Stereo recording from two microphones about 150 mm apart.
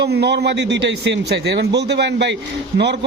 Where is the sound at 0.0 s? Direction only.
90° right.